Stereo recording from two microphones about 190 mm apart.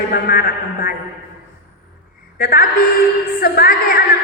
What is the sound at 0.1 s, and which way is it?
Speech, 50° left (ahead or behind).